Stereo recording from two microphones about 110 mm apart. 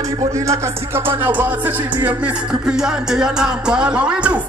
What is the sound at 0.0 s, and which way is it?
Music, 30° right (ahead or behind).